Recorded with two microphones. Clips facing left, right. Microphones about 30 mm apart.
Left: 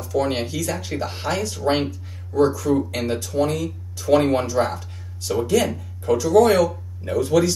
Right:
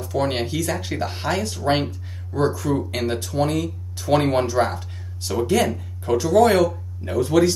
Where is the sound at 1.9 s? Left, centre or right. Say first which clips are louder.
Left 2 dB; right.